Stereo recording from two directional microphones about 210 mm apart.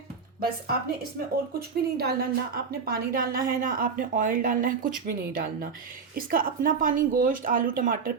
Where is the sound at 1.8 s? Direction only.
50° right (ahead or behind).